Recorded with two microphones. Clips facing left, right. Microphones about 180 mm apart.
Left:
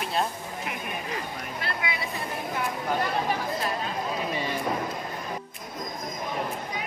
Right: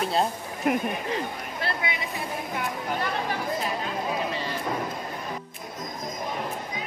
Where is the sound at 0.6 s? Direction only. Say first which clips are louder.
Right 14 dB; 45° right (ahead or behind).